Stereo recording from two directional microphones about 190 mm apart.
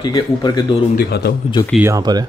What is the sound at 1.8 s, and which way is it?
Speech, 20° right (ahead or behind).